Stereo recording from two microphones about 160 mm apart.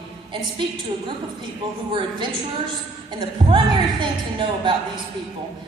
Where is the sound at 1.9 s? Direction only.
30° right (ahead or behind).